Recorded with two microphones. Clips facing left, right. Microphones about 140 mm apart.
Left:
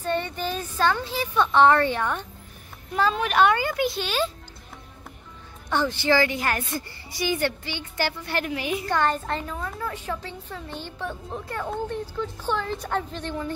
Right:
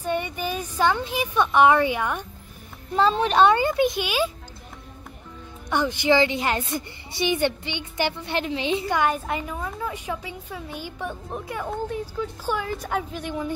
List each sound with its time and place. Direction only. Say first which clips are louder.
0.0 s a woman's voice: even; 10° right (ahead or behind)
3.0 s a woman's voice: right 3 dB; 30° right (ahead or behind); by 4.3 s 10° right (ahead or behind)
5.7 s a woman's voice: right 2 dB; 15° right (ahead or behind)
8.8 s a woman's voice: right 1 dB; 10° right (ahead or behind)